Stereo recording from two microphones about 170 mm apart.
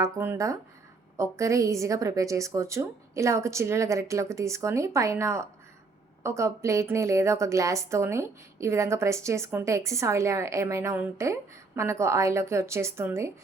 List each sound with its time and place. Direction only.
0.0 s a woman's voice: 15° right (ahead or behind)